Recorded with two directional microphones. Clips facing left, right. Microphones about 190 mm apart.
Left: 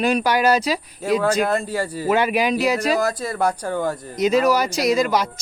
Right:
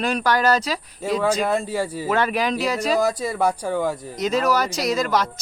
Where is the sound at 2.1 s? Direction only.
5° left (ahead or behind).